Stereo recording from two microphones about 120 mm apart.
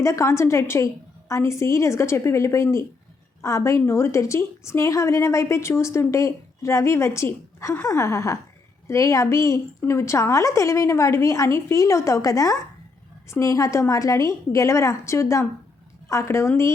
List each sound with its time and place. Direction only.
0.0 s a woman's voice: 25° left (ahead or behind)